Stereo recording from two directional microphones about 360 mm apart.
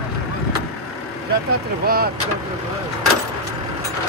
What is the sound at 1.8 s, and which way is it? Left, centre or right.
Speech, right.